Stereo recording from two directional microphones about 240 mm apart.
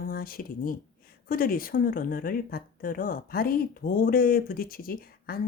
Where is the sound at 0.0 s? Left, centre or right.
Left.